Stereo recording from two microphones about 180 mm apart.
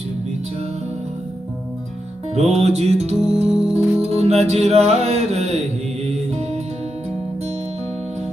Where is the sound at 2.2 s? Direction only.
35° right (ahead or behind).